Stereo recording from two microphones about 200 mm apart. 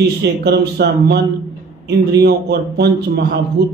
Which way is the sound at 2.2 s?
55° right (ahead or behind).